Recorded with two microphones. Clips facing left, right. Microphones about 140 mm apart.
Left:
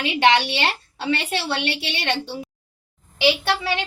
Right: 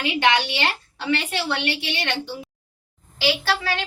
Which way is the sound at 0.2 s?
30° left (ahead or behind).